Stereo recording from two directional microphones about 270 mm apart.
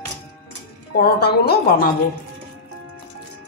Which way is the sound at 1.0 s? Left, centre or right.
Left.